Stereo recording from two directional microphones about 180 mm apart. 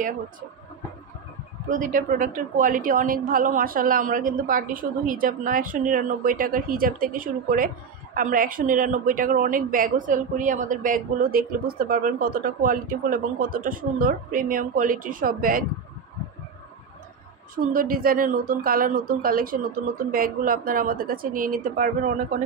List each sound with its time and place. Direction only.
1.7 s a woman's voice: 45° right (ahead or behind)
17.6 s a woman's voice: 55° right (ahead or behind)